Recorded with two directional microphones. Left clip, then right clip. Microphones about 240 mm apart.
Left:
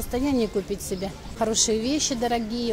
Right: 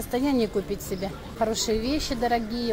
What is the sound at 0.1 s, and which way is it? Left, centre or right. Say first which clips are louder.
A woman's voice: even; centre.